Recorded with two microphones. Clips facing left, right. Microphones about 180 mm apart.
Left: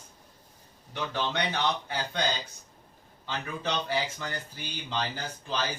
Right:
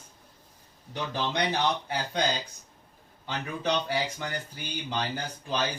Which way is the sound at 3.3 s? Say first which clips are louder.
Right 3 dB; 15° right (ahead or behind).